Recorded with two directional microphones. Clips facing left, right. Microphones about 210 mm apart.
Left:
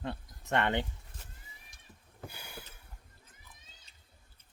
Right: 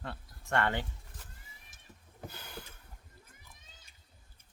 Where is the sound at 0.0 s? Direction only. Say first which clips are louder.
Left 5 dB; 20° left (ahead or behind).